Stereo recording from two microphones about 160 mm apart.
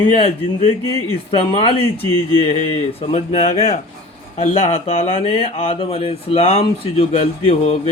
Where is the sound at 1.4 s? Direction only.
35° left (ahead or behind).